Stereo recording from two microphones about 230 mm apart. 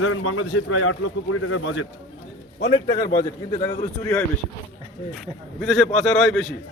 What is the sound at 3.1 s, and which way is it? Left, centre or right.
A man's voice, centre.